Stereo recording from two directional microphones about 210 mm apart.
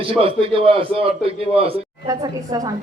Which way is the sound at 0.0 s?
25° right (ahead or behind).